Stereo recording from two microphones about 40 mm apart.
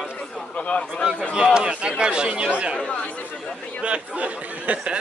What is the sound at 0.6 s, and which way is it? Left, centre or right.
Speech, left.